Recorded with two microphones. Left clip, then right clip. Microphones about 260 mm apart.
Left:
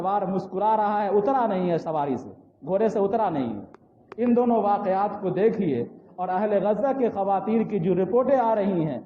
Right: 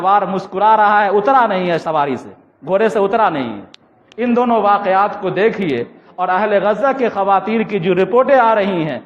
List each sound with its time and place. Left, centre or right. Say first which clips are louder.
0.0 s a man's voice: right 11 dB; right